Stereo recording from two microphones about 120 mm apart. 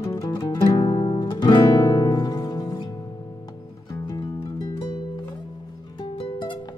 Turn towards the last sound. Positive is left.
turn(degrees=45)  # may be behind; listen again after turning